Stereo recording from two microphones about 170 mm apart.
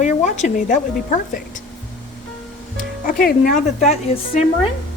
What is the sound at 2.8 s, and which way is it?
Speech, 55° left (ahead or behind).